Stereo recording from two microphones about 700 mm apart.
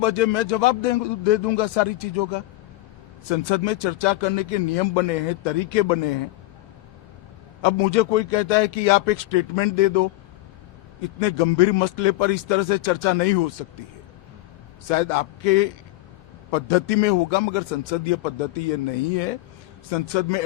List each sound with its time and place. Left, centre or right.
0.0 s a man's voice: left
7.6 s a man's voice: left
11.2 s a man's voice: left
14.8 s a man's voice: left
19.9 s a man's voice: left